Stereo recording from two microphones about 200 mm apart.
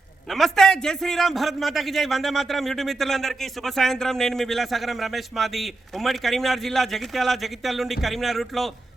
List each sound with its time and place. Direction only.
0.3 s a man's voice: centre (ahead or behind)